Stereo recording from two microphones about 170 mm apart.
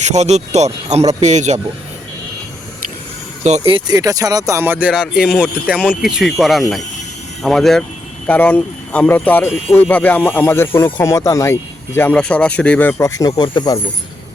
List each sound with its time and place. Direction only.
0.0 s speech: 40° right (ahead or behind)
3.7 s speech: 25° right (ahead or behind); by 13.7 s 25° left (ahead or behind)